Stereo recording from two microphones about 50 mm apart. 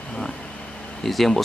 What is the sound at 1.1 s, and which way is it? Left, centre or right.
Speech, centre.